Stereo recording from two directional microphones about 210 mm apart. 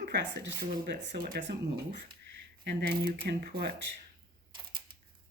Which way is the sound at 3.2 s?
50° right (ahead or behind).